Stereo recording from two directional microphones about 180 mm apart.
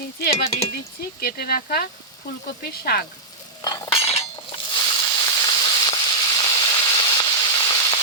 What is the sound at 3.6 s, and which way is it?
Cutlery, 30° left (ahead or behind).